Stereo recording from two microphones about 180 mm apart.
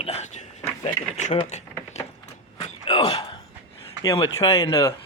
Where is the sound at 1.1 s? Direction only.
40° left (ahead or behind).